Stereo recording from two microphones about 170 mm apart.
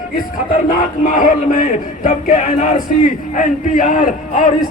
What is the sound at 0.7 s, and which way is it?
A man's voice, 50° left (ahead or behind).